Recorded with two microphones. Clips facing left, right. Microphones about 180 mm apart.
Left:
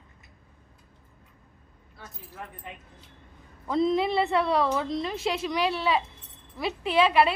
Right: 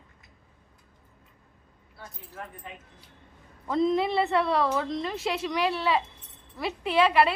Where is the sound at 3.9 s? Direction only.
20° left (ahead or behind).